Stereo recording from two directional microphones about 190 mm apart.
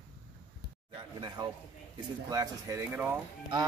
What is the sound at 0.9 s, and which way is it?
Speech, 25° right (ahead or behind).